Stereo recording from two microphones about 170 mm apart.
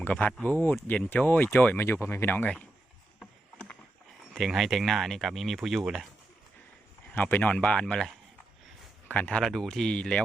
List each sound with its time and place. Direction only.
0.0 s speech: 10° left (ahead or behind)
3.2 s rowboat: 5° left (ahead or behind)
4.4 s speech: centre (ahead or behind)
7.1 s speech: 10° left (ahead or behind)